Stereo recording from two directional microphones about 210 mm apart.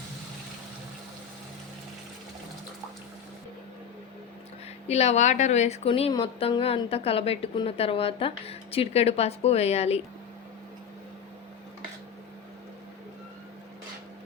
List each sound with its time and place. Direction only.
4.9 s a woman's voice: 30° left (ahead or behind)